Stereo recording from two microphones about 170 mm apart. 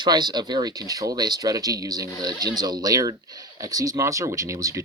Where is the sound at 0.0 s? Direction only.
25° right (ahead or behind).